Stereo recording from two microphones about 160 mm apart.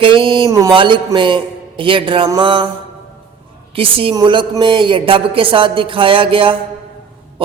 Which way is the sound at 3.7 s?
35° right (ahead or behind).